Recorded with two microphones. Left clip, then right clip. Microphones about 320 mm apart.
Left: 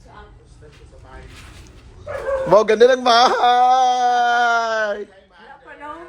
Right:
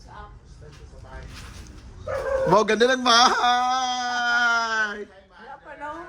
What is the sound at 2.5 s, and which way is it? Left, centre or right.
Wail, centre.